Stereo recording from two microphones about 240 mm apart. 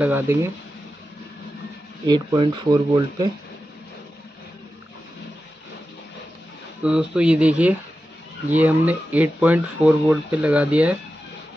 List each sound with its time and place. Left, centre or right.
0.0 s speech: centre
2.0 s speech: centre
6.8 s speech: centre